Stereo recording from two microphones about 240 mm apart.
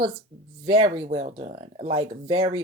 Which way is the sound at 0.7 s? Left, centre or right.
Centre.